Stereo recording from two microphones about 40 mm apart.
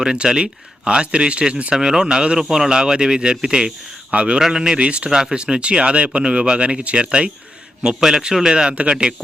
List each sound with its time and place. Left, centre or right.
0.0 s speech: centre
1.7 s speech: centre
4.4 s speech: centre
5.1 s speech: centre
7.8 s a man's voice: centre